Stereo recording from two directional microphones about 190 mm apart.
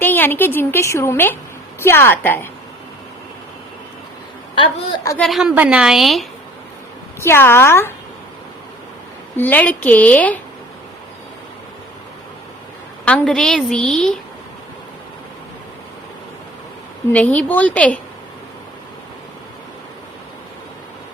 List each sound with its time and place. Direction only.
0.0 s a woman's voice: 10° left (ahead or behind)
4.5 s a woman's voice: 25° left (ahead or behind)
5.0 s a woman's voice: 5° left (ahead or behind)
7.2 s a woman's voice: 10° left (ahead or behind)
9.4 s a woman's voice: 10° left (ahead or behind)
13.1 s a woman's voice: 5° left (ahead or behind)
17.1 s a woman's voice: 5° left (ahead or behind)